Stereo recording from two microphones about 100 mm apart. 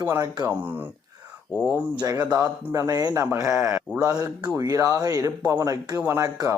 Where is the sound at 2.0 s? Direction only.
40° right (ahead or behind).